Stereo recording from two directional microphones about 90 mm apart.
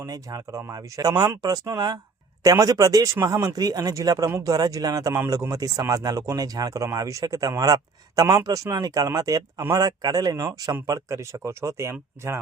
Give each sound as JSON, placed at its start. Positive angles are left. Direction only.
{"t": 0.0, "sound": "speech", "side_deg": -40}
{"t": 5.1, "sound": "speech", "side_deg": -35}